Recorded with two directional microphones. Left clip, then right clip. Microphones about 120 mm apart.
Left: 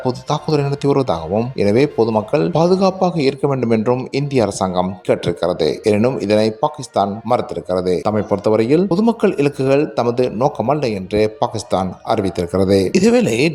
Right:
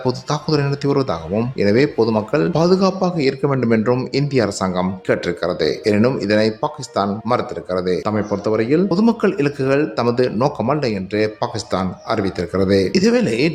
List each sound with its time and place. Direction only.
0.0 s speech: 25° left (ahead or behind); by 8.9 s 50° left (ahead or behind)
8.9 s speech: 35° left (ahead or behind)